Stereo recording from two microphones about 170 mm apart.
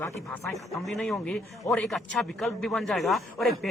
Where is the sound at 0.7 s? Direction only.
Centre (ahead or behind).